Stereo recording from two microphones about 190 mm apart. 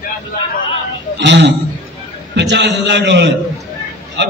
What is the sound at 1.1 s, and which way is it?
A man's voice, 65° right (ahead or behind).